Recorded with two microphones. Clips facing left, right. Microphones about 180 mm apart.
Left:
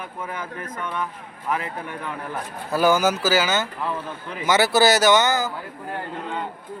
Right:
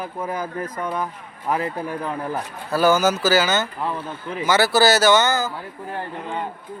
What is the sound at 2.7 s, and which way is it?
A man's voice, 15° left (ahead or behind).